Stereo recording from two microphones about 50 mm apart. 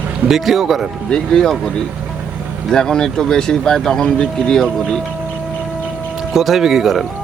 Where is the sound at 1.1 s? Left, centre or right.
Centre.